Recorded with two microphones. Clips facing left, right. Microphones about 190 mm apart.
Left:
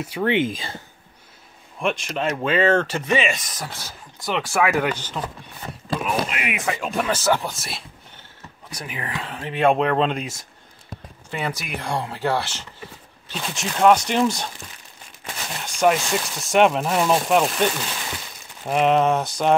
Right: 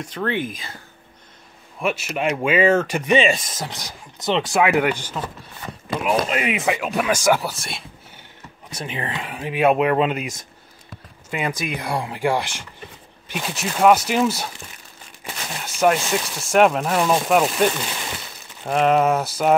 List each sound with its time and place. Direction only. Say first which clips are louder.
0.0 s speech: left 3 dB; 10° left (ahead or behind); by 0.7 s 30° left (ahead or behind)
1.8 s speech: right 1 dB; 5° right (ahead or behind)
3.1 s speech: right 8 dB; 30° right (ahead or behind); by 5.2 s 10° right (ahead or behind)
6.2 s speech: right 5 dB; 35° right (ahead or behind)
6.8 s speech: right 2 dB; 5° right (ahead or behind)
8.6 s speech: right 4 dB; 25° right (ahead or behind)
9.2 s speech: right 1 dB; 10° right (ahead or behind)
18.7 s speech: right 1 dB; centre (ahead or behind)